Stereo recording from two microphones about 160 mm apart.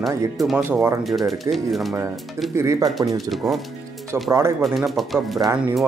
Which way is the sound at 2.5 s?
20° right (ahead or behind).